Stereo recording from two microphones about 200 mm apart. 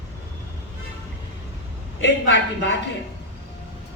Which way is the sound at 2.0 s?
60° left (ahead or behind).